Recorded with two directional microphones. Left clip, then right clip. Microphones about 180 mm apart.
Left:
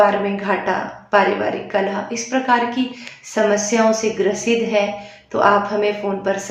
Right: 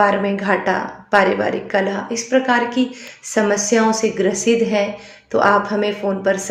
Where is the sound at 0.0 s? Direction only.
30° right (ahead or behind).